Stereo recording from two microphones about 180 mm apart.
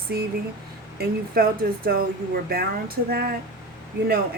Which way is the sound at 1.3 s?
55° right (ahead or behind).